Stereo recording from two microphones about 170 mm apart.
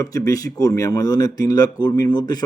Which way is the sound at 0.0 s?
20° left (ahead or behind).